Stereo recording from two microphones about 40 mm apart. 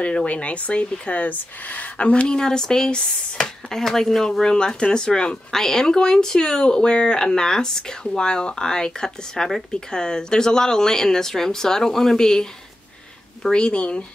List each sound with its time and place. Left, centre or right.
0.0 s speech: left
2.3 s speech: centre
5.5 s speech: centre
13.5 s speech: left